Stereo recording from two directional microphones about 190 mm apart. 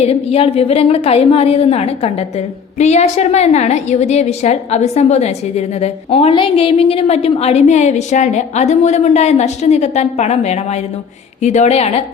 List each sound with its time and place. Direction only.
0.0 s a woman's voice: 30° left (ahead or behind)